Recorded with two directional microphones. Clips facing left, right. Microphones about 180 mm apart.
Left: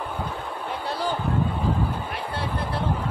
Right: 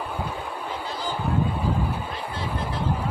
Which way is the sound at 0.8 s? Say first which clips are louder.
Left 7 dB; 65° left (ahead or behind).